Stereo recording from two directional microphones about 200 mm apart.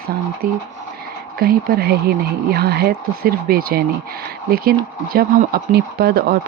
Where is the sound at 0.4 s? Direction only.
45° right (ahead or behind).